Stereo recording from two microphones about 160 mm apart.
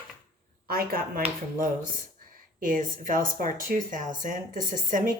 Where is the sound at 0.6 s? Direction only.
70° right (ahead or behind).